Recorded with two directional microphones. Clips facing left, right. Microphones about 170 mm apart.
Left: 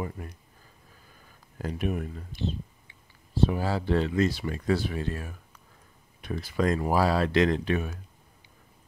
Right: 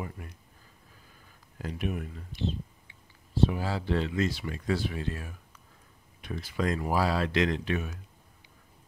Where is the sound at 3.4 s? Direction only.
45° left (ahead or behind).